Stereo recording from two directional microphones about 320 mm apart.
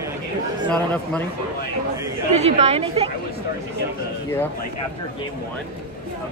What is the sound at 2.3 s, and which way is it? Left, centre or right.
Speech, centre.